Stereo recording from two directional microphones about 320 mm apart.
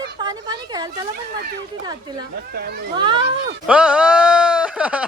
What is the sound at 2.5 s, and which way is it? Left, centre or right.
Speech, right.